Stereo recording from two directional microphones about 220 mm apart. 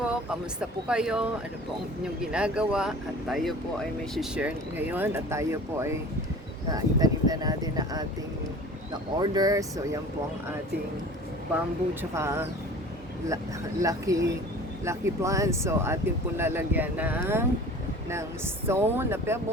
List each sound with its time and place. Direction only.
0.0 s speech: 5° right (ahead or behind)
12.1 s speech: 10° right (ahead or behind)
18.7 s speech: 10° right (ahead or behind)